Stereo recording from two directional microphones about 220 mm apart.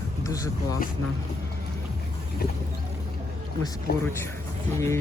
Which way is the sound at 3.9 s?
45° left (ahead or behind).